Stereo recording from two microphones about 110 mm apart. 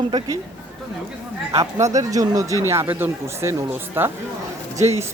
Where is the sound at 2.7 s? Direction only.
20° right (ahead or behind).